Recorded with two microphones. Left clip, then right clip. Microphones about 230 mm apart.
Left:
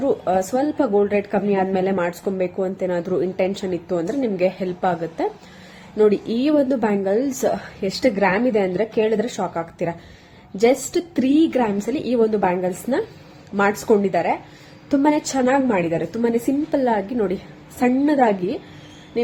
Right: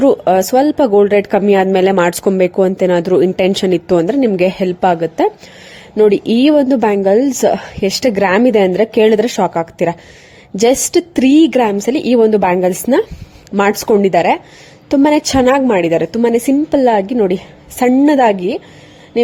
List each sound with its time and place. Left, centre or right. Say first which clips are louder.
0.0 s speech: right 9 dB; right